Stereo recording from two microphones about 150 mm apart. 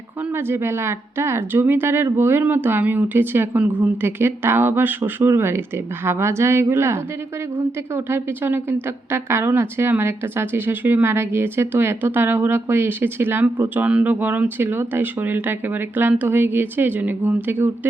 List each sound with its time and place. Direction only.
0.3 s a woman's voice: 15° right (ahead or behind)